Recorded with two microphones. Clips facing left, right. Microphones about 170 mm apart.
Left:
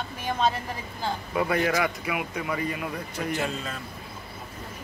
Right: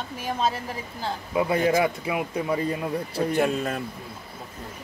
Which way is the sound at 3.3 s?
55° right (ahead or behind).